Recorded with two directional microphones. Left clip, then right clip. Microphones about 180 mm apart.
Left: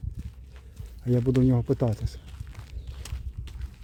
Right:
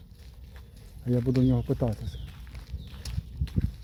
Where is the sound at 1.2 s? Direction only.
30° left (ahead or behind).